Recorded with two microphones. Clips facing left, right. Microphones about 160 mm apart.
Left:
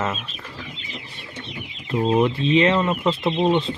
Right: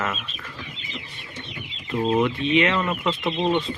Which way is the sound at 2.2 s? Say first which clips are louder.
Left 3 dB; 30° left (ahead or behind).